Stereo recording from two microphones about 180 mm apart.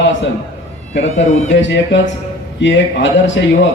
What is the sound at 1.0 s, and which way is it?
Speech, 40° left (ahead or behind).